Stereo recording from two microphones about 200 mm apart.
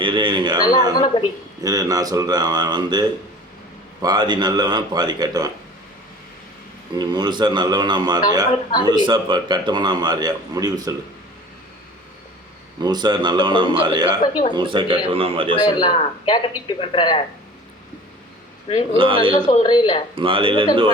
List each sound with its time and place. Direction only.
0.0 s speech: 25° right (ahead or behind)
0.9 s a man's voice: 20° left (ahead or behind)
1.2 s a man's voice: 20° right (ahead or behind)
6.9 s a man's voice: 20° right (ahead or behind)
12.8 s a man's voice: 20° right (ahead or behind)
14.2 s a man's voice: 20° left (ahead or behind)
14.5 s a man's voice: 25° right (ahead or behind)
15.6 s a man's voice: 25° left (ahead or behind)
18.9 s a man's voice: 25° right (ahead or behind)
19.3 s a man's voice: 25° left (ahead or behind)
20.1 s a man's voice: 25° right (ahead or behind)